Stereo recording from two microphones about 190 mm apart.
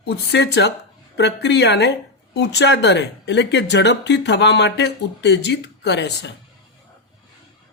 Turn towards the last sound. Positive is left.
turn(degrees=65)  # may be behind; listen again after turning